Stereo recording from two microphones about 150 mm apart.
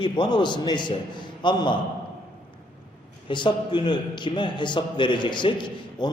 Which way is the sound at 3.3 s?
30° left (ahead or behind).